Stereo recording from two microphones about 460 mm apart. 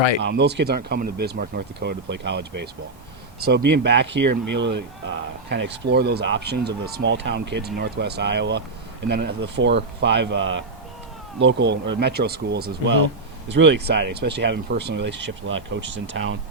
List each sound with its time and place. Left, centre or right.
0.2 s speech: right
3.7 s speech: right